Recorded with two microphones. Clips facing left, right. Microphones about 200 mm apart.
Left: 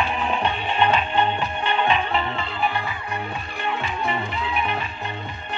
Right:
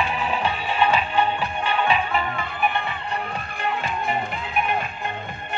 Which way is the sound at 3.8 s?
50° right (ahead or behind).